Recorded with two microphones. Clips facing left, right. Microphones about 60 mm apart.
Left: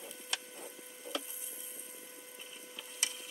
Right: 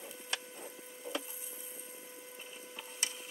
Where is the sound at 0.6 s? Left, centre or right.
Right.